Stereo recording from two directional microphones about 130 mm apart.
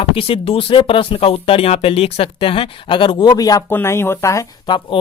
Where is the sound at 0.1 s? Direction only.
45° left (ahead or behind); by 3.6 s 30° left (ahead or behind).